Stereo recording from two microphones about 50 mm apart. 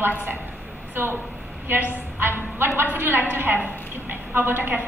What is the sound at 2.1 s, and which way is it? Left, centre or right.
Speech, right.